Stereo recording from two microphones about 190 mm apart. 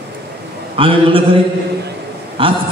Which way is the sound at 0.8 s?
30° right (ahead or behind).